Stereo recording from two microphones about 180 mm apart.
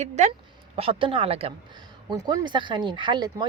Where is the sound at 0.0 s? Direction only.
40° right (ahead or behind).